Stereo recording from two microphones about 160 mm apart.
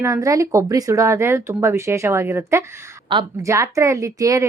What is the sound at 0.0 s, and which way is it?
Speech, 20° right (ahead or behind).